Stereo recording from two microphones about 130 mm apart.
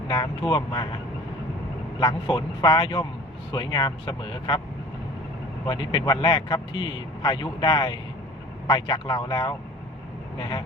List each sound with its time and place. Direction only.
0.1 s a man's voice: 35° left (ahead or behind)
2.0 s a man's voice: 35° left (ahead or behind)
5.6 s a man's voice: 35° left (ahead or behind)